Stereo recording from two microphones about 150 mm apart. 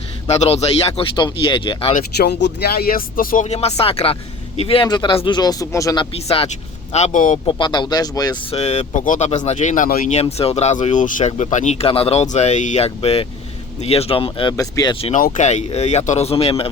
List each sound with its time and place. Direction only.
0.3 s speech: 45° left (ahead or behind)
1.1 s speech: 30° left (ahead or behind)
2.0 s speech: 90° left; by 3.4 s 70° left (ahead or behind)
3.4 s speech: 45° left (ahead or behind); by 6.1 s 25° left (ahead or behind)
6.1 s speech: 40° left (ahead or behind); by 7.3 s 60° left (ahead or behind)
7.4 s speech: 30° left (ahead or behind)
8.4 s speech: 45° left (ahead or behind); by 10.2 s 65° left (ahead or behind)
10.2 s speech: 45° left (ahead or behind)
11.9 s speech: 40° left (ahead or behind)
14.5 s speech: 25° left (ahead or behind)
15.1 s speech: 55° left (ahead or behind); by 16.6 s 40° left (ahead or behind)